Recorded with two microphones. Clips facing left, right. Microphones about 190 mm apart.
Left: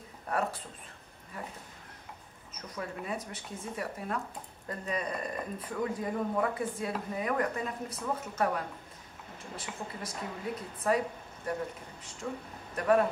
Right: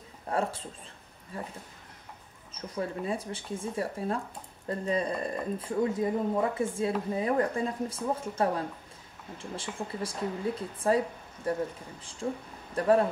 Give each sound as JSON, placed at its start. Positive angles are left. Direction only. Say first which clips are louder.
{"t": 0.3, "sound": "speech", "louder": "right 2 dB", "side_deg": -25}
{"t": 2.5, "sound": "speech", "louder": "right 6 dB", "side_deg": -30}